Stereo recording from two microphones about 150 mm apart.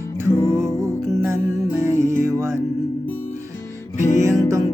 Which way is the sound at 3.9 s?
55° left (ahead or behind).